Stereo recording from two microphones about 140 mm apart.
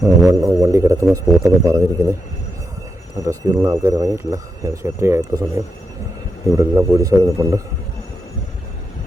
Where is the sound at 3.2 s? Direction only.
25° right (ahead or behind).